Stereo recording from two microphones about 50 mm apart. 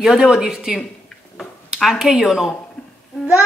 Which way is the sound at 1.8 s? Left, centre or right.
Centre.